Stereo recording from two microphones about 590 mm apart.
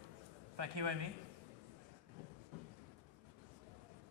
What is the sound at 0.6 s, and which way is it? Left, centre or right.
Speech, right.